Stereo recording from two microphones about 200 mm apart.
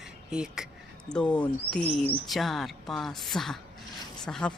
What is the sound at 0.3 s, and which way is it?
Speech, 5° right (ahead or behind).